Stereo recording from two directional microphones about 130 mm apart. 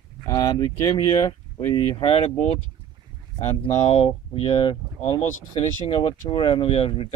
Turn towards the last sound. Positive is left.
turn(degrees=45)  # may be behind; listen again after turning